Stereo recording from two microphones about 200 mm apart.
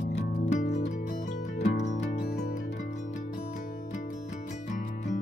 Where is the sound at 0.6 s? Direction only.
35° left (ahead or behind).